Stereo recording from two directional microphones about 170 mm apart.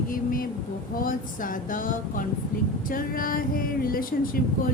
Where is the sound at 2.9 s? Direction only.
55° left (ahead or behind).